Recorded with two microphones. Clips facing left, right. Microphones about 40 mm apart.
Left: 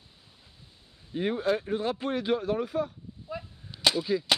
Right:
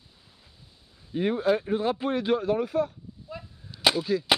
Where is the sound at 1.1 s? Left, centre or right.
Centre.